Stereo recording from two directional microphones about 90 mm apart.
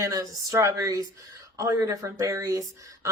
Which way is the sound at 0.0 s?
40° right (ahead or behind).